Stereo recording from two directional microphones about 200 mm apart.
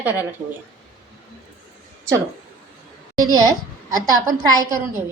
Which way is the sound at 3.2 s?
20° right (ahead or behind).